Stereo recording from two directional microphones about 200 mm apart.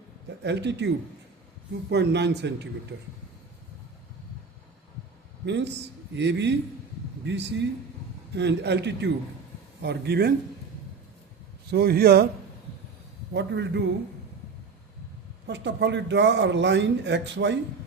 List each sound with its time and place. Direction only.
0.3 s speech: 60° right (ahead or behind)
1.9 s speech: 60° right (ahead or behind)
5.5 s speech: 60° right (ahead or behind)
11.7 s speech: 55° right (ahead or behind)
13.3 s speech: 60° right (ahead or behind)
15.4 s speech: 60° right (ahead or behind)